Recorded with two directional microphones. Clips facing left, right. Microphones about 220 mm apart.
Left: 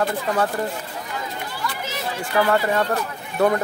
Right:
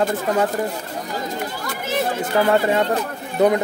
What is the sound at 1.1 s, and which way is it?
Chatter, 45° right (ahead or behind).